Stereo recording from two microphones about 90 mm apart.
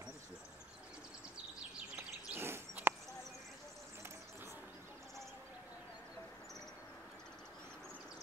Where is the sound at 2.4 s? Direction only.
25° right (ahead or behind).